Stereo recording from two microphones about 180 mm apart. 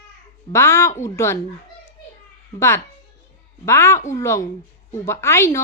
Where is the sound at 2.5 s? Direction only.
15° left (ahead or behind).